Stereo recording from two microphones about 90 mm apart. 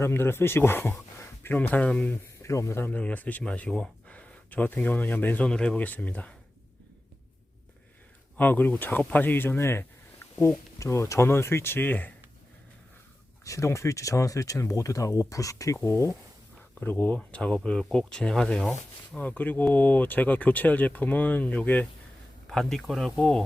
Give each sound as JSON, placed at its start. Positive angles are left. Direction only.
{"t": 0.0, "sound": "speech", "side_deg": 25}
{"t": 2.4, "sound": "speech", "side_deg": 35}
{"t": 2.9, "sound": "speech", "side_deg": 15}
{"t": 8.4, "sound": "speech", "side_deg": 20}
{"t": 13.4, "sound": "speech", "side_deg": 35}
{"t": 16.8, "sound": "speech", "side_deg": 20}
{"t": 22.4, "sound": "speech", "side_deg": 5}